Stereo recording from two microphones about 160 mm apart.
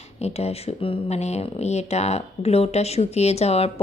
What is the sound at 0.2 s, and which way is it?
Speech, 40° left (ahead or behind).